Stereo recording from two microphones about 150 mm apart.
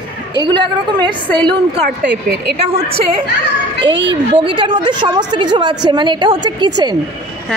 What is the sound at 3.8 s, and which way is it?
A woman's voice, 35° right (ahead or behind).